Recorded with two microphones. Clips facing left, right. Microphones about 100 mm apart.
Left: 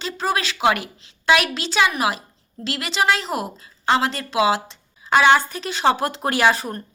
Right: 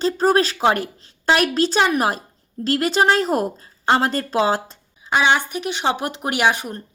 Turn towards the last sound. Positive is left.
turn(degrees=-15)  # may be behind; listen again after turning